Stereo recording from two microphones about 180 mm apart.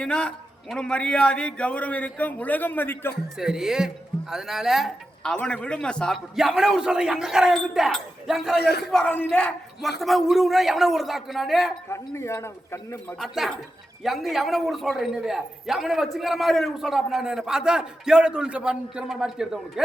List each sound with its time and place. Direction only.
0.0 s a man's voice: 5° left (ahead or behind)
3.3 s a man's voice: 5° right (ahead or behind)
11.9 s a man's voice: 15° left (ahead or behind)
13.1 s a man's voice: centre (ahead or behind)